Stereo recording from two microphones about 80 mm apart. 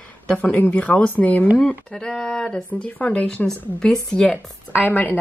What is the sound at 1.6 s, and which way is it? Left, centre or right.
Speech, centre.